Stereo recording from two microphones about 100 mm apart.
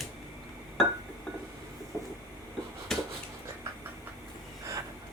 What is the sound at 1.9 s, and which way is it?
Vehicle, 25° left (ahead or behind).